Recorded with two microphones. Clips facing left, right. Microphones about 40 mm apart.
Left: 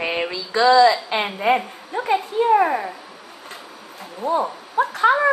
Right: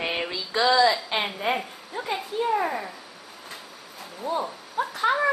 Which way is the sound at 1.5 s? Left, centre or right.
Left.